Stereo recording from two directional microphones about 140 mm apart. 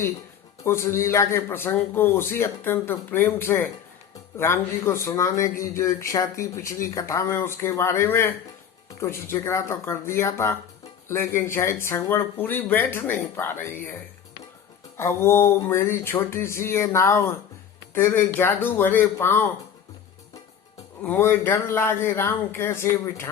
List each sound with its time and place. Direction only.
0.6 s a man's voice: 20° left (ahead or behind)
4.4 s a sound: 20° left (ahead or behind)
11.1 s a man's voice: 15° left (ahead or behind)
14.9 s a sound: 20° left (ahead or behind)
17.9 s a man's voice: 15° left (ahead or behind)
21.0 s a man's voice: 15° left (ahead or behind)